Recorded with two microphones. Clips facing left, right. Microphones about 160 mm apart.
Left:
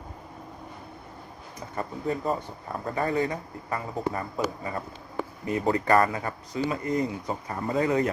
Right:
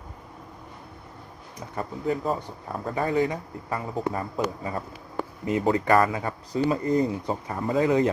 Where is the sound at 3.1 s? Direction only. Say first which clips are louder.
Right 3 dB; 15° right (ahead or behind).